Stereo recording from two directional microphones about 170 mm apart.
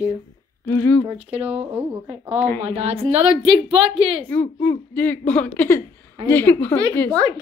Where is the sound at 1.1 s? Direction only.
35° right (ahead or behind).